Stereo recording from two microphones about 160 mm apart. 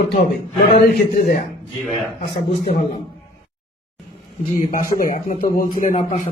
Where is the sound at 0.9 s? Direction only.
70° left (ahead or behind).